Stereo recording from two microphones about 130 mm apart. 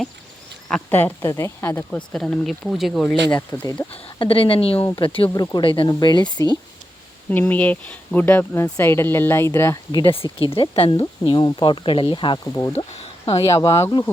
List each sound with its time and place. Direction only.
0.9 s speech: 15° left (ahead or behind)
1.9 s speech: 5° left (ahead or behind)
3.2 s speech: 15° left (ahead or behind)
3.9 s speech: 45° left (ahead or behind)
5.3 s speech: 30° left (ahead or behind)
7.3 s speech: 15° left (ahead or behind)
9.9 s speech: 40° left (ahead or behind)
12.7 s a sound: 55° left (ahead or behind)
13.3 s speech: 25° left (ahead or behind)